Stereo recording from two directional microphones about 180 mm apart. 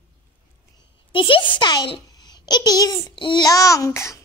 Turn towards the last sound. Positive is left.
turn(degrees=15)  # may be behind; listen again after turning